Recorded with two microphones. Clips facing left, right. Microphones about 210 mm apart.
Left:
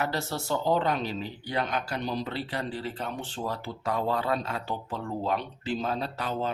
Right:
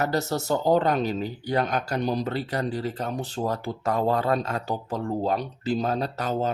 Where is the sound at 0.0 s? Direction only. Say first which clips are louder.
Right 5 dB; 40° right (ahead or behind).